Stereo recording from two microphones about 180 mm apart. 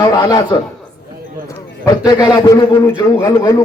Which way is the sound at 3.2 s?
20° left (ahead or behind).